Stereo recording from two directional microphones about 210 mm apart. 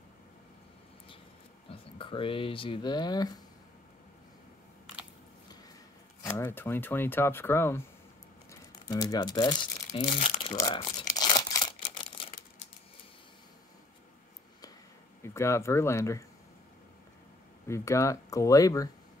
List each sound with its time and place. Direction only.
1.7 s speech: 25° left (ahead or behind)
6.2 s speech: 10° left (ahead or behind)
8.5 s crumpling: 15° left (ahead or behind)
12.3 s crushing: 45° left (ahead or behind)
15.2 s speech: 15° left (ahead or behind)
17.6 s speech: 15° left (ahead or behind)